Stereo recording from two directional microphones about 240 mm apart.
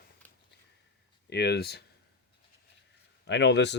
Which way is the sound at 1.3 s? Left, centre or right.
Left.